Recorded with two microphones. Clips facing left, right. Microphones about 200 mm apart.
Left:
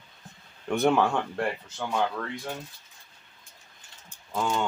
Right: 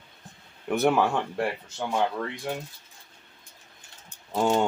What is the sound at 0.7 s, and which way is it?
Speech, 5° right (ahead or behind).